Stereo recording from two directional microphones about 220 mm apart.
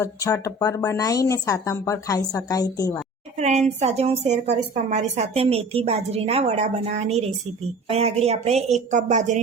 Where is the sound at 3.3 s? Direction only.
30° right (ahead or behind).